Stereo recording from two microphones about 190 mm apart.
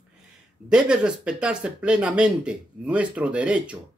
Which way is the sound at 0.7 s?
5° right (ahead or behind).